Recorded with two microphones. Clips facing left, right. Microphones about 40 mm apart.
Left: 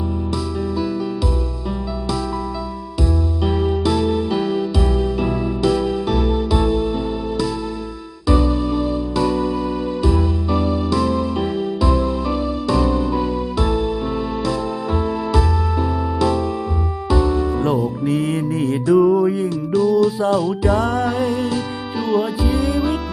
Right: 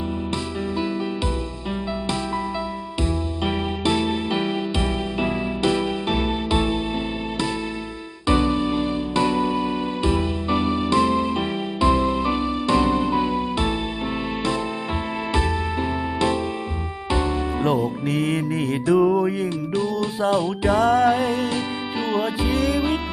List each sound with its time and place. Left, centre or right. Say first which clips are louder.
3.4 s music: left 4 dB; right
8.3 s music: left 2 dB; right
18.0 s music: left 3 dB; right
18.9 s music: left 4 dB; centre
20.0 s music: left 5 dB; right
20.8 s music: right 2 dB; right; by 22.9 s centre